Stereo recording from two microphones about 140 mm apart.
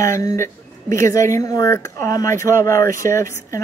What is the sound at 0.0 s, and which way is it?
Speech, 20° left (ahead or behind).